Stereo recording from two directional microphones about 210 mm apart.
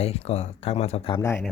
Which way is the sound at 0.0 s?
30° left (ahead or behind).